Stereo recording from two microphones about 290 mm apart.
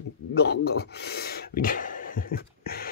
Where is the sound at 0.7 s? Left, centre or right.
Left.